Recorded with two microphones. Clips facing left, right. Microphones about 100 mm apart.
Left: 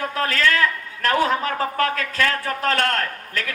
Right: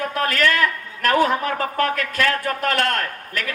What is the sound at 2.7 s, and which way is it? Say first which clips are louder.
Speech: left 1 dB; 20° right (ahead or behind).